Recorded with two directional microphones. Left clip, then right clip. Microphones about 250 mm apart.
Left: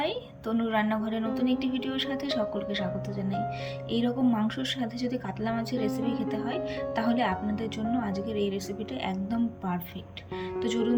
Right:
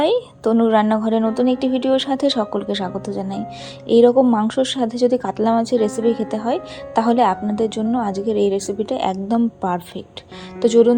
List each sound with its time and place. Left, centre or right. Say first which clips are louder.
0.0 s a woman's voice: right 14 dB; centre